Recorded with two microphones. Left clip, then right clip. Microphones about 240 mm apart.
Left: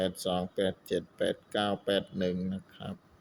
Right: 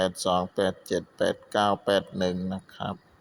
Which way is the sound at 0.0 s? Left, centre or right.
Centre.